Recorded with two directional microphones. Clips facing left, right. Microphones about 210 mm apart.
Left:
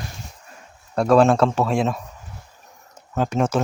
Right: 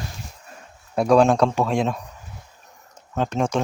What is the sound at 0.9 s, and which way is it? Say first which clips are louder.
Speech: left 1 dB; centre (ahead or behind).